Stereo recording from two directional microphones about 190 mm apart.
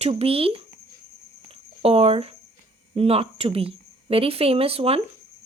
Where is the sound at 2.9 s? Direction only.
30° right (ahead or behind).